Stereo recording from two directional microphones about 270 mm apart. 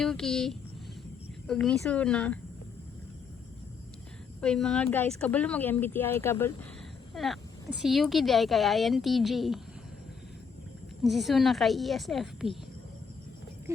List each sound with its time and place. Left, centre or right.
0.0 s a woman's voice: centre
4.4 s a woman's voice: centre
11.0 s a woman's voice: centre
13.7 s speech: centre